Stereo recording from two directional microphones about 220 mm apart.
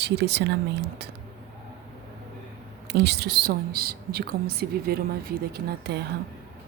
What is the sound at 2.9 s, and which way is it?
A woman's voice, 50° right (ahead or behind).